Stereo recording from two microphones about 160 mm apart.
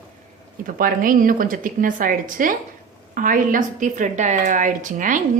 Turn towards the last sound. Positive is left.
turn(degrees=-55)  # may be behind; listen again after turning